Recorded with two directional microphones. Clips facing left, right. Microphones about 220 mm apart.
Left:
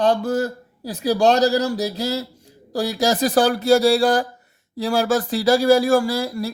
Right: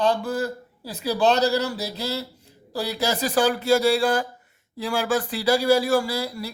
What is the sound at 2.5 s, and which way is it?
Speech, 40° left (ahead or behind).